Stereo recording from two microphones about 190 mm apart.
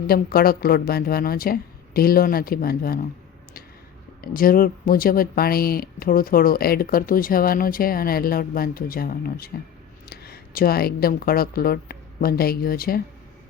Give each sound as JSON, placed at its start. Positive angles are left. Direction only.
{"t": 0.1, "sound": "speech", "side_deg": 50}
{"t": 4.2, "sound": "speech", "side_deg": 50}